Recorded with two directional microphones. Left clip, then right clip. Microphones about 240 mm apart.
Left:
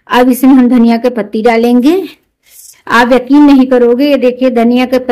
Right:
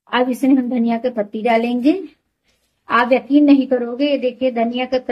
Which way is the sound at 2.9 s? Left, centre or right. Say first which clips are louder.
Left 7 dB; left.